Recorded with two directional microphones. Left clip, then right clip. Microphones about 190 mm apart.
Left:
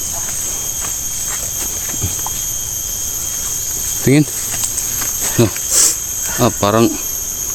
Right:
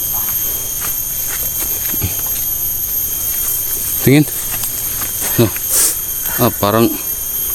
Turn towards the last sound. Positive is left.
turn(degrees=0)  # may be behind; listen again after turning